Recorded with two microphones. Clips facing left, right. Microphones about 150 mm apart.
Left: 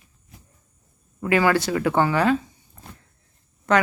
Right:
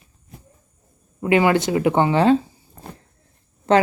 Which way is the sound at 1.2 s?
25° right (ahead or behind).